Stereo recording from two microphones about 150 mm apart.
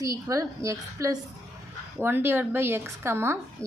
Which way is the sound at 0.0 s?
20° right (ahead or behind).